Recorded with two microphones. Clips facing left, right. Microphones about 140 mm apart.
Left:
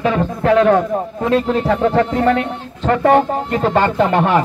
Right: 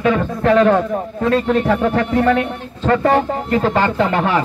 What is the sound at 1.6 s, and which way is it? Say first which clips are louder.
Speech: left 2 dB; 30° left (ahead or behind).